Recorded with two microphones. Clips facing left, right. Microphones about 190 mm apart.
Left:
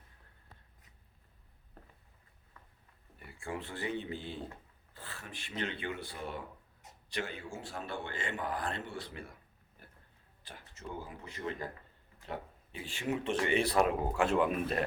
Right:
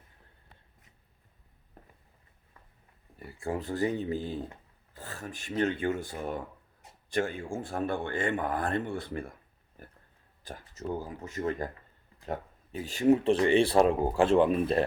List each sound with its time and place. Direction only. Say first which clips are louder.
3.2 s a man's voice: right 7 dB; 40° right (ahead or behind)
9.8 s a sound: right 8 dB; 45° right (ahead or behind)
10.6 s speech: right 9 dB; 40° right (ahead or behind)